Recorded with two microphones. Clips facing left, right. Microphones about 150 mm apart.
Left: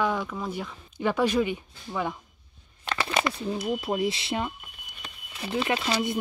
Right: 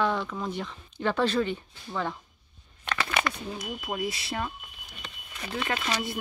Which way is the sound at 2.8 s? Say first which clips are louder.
Left 2 dB; 25° left (ahead or behind).